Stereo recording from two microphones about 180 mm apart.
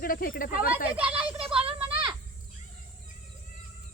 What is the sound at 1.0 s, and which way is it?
Speech, 10° right (ahead or behind).